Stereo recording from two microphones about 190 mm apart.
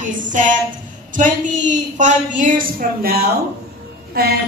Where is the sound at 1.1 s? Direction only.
40° right (ahead or behind).